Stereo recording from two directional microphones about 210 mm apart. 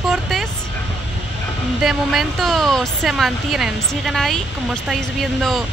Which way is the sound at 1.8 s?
Centre (ahead or behind).